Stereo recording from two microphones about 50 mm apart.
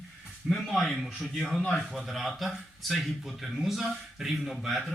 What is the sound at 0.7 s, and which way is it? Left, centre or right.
A man's voice, centre.